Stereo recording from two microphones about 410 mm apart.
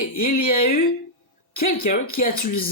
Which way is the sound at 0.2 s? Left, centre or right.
Left.